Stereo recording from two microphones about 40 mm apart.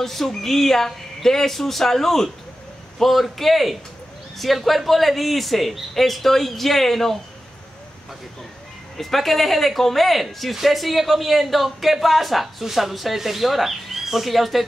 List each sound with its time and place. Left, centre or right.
0.0 s speech: centre
8.9 s speech: centre